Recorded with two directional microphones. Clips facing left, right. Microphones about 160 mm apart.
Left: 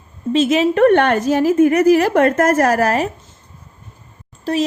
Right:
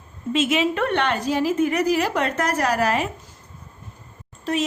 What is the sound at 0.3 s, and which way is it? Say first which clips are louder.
Speech: left 6 dB; 40° left (ahead or behind).